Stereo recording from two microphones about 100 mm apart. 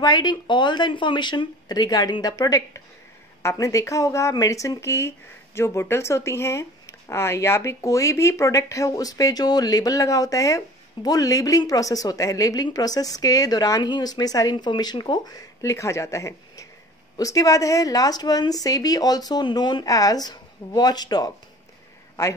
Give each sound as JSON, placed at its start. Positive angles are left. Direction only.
{"t": 0.0, "sound": "speech", "side_deg": 45}